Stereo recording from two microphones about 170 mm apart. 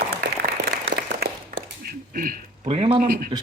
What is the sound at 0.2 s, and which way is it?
Applause, 75° right (ahead or behind).